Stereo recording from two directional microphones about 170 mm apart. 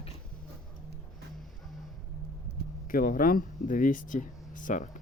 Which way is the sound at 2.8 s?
55° left (ahead or behind).